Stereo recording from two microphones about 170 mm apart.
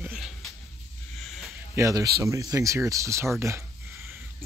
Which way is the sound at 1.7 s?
20° right (ahead or behind).